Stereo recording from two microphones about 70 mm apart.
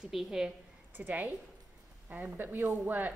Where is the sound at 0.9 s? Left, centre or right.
Right.